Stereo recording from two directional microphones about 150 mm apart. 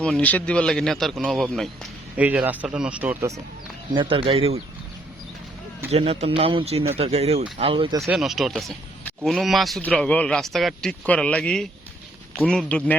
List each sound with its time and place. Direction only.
0.0 s speech: 10° left (ahead or behind)
2.1 s speech: 10° right (ahead or behind)
3.9 s speech: 35° right (ahead or behind)
5.9 s speech: 45° right (ahead or behind)
8.0 s speech: centre (ahead or behind)